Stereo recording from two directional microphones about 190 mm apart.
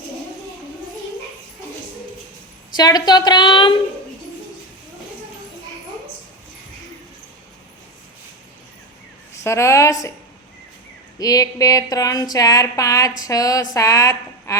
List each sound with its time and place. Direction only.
2.7 s speech: 20° left (ahead or behind)
9.3 s a woman's voice: 15° left (ahead or behind)
11.2 s speech: 20° left (ahead or behind)
13.2 s a sound: 20° left (ahead or behind)
13.7 s a woman's voice: 15° left (ahead or behind)